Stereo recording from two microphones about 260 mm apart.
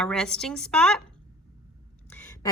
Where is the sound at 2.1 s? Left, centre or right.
Centre.